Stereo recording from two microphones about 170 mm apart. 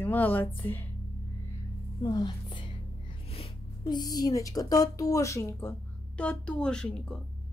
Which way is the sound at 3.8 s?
25° left (ahead or behind).